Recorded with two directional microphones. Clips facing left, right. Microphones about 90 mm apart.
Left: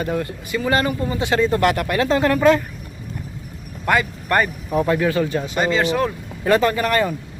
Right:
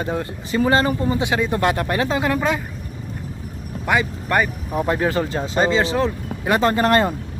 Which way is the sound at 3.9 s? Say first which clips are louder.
Left 1 dB; 15° right (ahead or behind).